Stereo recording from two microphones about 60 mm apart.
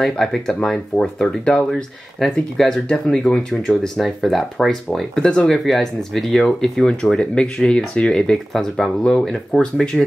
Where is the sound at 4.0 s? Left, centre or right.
Centre.